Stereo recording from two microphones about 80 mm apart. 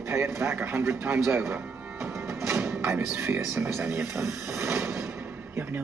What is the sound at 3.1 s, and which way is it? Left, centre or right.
Speech, centre.